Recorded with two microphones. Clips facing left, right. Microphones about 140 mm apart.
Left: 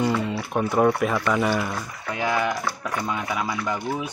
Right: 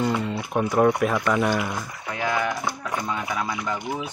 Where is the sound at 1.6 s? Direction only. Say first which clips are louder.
Even; 10° right (ahead or behind).